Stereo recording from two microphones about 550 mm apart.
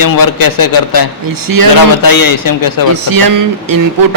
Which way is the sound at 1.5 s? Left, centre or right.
Right.